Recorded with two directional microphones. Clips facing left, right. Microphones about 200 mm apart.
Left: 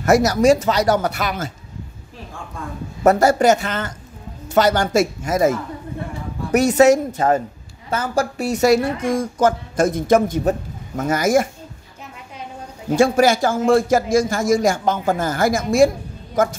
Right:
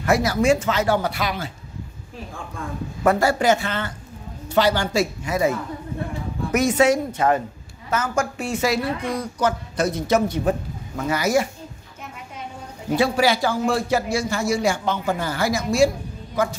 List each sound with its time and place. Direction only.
0.0 s a woman's voice: 45° left (ahead or behind)
3.0 s a woman's voice: 40° left (ahead or behind)
12.9 s a woman's voice: 45° left (ahead or behind)